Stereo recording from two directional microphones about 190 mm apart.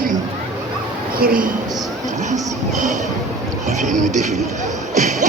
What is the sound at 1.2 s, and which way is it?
A woman's voice, 50° right (ahead or behind).